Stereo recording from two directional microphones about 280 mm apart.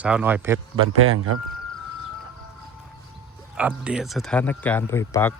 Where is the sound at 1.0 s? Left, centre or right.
Right.